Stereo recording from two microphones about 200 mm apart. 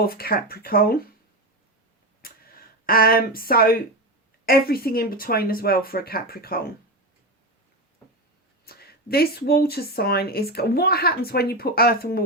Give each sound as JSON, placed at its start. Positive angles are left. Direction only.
{"t": 0.0, "sound": "speech", "side_deg": 50}
{"t": 2.2, "sound": "tick", "side_deg": 45}
{"t": 2.8, "sound": "speech", "side_deg": 45}
{"t": 8.6, "sound": "speech", "side_deg": 50}